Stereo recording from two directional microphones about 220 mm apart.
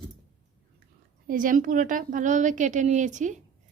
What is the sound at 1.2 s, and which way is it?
A woman's voice, 40° right (ahead or behind).